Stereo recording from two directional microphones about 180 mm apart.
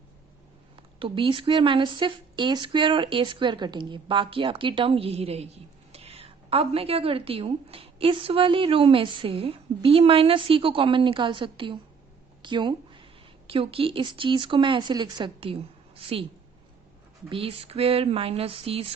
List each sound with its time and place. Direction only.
0.8 s a woman's voice: 30° right (ahead or behind)
12.4 s a sound: 25° right (ahead or behind)
13.5 s speech: 30° right (ahead or behind)
17.2 s a woman's voice: 30° right (ahead or behind)